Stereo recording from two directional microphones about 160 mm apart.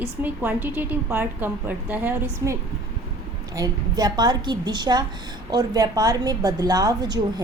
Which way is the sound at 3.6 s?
25° right (ahead or behind).